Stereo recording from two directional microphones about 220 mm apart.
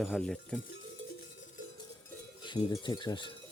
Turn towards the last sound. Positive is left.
turn(degrees=20)  # may be behind; listen again after turning